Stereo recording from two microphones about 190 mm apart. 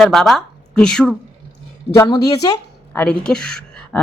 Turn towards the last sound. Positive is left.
turn(degrees=5)  # may be behind; listen again after turning